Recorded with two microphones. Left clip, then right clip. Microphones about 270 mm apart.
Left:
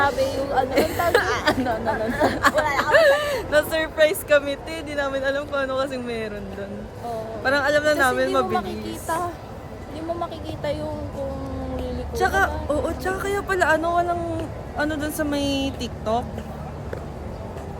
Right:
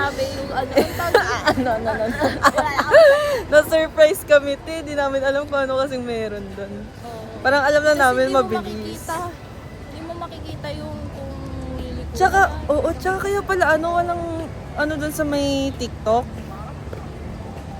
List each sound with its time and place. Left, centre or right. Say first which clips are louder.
0.7 s speech: right 6 dB; centre
1.9 s speech: right 1 dB; centre
2.4 s speech: right 5 dB; centre
8.9 s speech: left 3 dB; centre
12.1 s speech: right 5 dB; centre